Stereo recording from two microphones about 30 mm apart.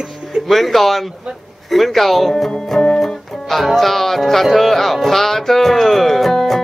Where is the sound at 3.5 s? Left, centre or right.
Centre.